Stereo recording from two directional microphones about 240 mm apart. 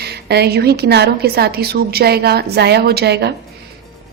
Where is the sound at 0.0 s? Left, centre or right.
Right.